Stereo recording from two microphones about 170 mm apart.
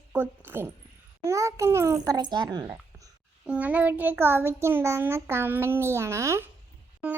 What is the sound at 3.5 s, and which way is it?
A child's voice, 10° right (ahead or behind).